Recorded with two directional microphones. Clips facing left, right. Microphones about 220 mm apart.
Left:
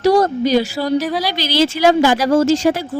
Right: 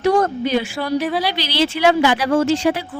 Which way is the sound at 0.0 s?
40° left (ahead or behind).